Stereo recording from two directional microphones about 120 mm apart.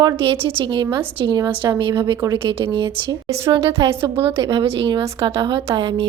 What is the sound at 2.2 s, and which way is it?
A woman's voice, 40° right (ahead or behind).